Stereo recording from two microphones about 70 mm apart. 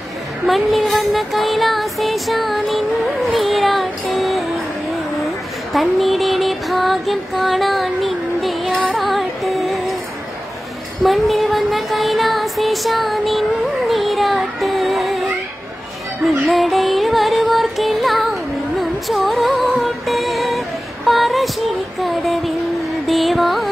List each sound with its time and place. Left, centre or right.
0.5 s music: centre
5.2 s a sound: centre
8.7 s music: centre
11.0 s music: centre
16.4 s music: centre